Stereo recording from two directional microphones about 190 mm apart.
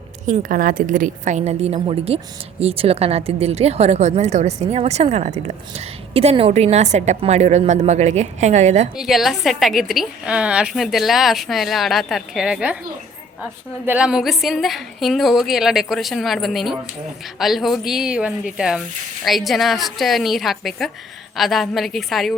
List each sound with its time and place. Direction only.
0.3 s a woman's voice: 45° right (ahead or behind)
9.0 s a woman's voice: centre (ahead or behind)
13.8 s a woman's voice: 5° right (ahead or behind)